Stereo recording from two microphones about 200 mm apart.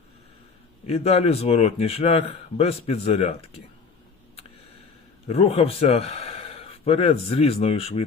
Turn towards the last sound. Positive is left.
turn(degrees=30)  # may be behind; listen again after turning